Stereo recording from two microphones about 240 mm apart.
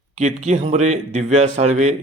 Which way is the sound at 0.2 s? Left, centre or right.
Right.